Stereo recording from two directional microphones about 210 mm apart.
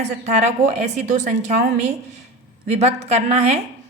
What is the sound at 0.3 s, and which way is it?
A woman's voice, 35° right (ahead or behind).